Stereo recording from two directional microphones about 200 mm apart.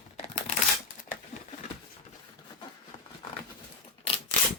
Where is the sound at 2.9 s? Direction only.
35° left (ahead or behind).